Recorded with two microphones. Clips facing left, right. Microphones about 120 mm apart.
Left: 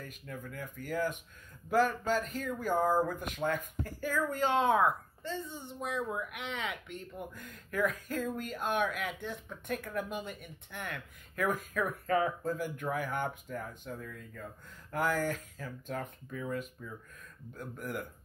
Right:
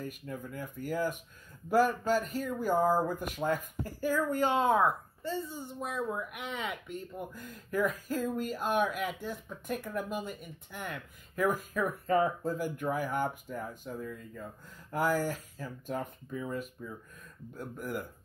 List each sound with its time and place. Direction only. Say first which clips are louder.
0.2 s speech: right 1 dB; 25° right (ahead or behind)
0.8 s speech: right 1 dB; 5° right (ahead or behind)